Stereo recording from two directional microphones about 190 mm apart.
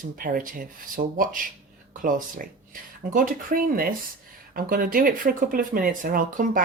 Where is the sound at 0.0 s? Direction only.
45° right (ahead or behind).